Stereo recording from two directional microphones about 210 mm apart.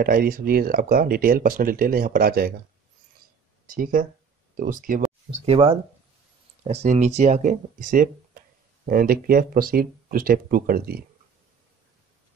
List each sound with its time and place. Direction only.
0.0 s speech: 45° right (ahead or behind)
3.6 s speech: 40° right (ahead or behind)
5.4 s speech: 25° right (ahead or behind); by 11.1 s 45° right (ahead or behind)